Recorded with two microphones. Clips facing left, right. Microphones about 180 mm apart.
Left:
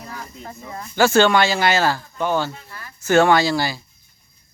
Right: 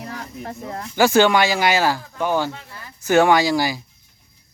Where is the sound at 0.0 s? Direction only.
70° right (ahead or behind).